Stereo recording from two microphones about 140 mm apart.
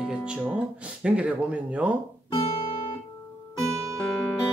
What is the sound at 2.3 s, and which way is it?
Guitar, 40° left (ahead or behind).